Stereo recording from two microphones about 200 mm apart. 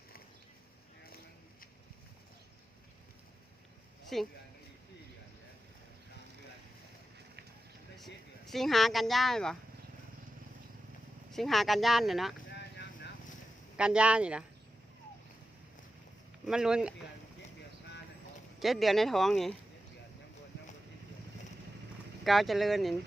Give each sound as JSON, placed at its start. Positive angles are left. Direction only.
{"t": 4.1, "sound": "speech", "side_deg": 0}
{"t": 7.9, "sound": "speech", "side_deg": 0}
{"t": 11.3, "sound": "speech", "side_deg": 0}
{"t": 12.5, "sound": "vehicle", "side_deg": 60}
{"t": 13.7, "sound": "speech", "side_deg": -5}
{"t": 16.5, "sound": "speech", "side_deg": -5}
{"t": 18.6, "sound": "speech", "side_deg": 0}
{"t": 22.2, "sound": "speech", "side_deg": 0}